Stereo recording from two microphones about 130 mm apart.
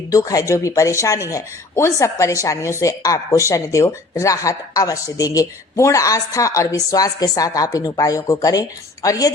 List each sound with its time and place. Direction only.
0.1 s speech: 25° left (ahead or behind)